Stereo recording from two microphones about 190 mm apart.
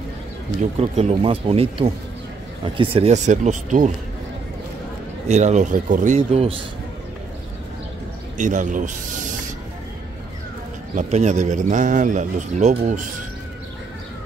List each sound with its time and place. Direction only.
0.7 s a man's voice: 35° right (ahead or behind)
5.3 s a man's voice: 40° right (ahead or behind)
8.4 s speech: 40° right (ahead or behind)
11.0 s a man's voice: 40° right (ahead or behind)